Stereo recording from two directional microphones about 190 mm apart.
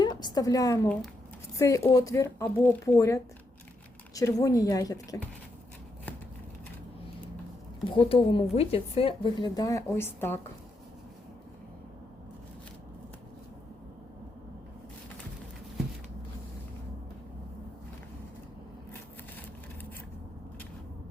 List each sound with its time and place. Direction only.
0.0 s a woman's voice: 20° left (ahead or behind)
7.9 s speech: 30° left (ahead or behind); by 10.4 s 10° left (ahead or behind)